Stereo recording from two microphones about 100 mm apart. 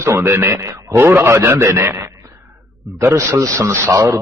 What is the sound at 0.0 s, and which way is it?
A man's voice, 25° right (ahead or behind).